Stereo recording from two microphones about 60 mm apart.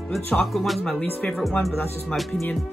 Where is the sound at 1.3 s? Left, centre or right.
Centre.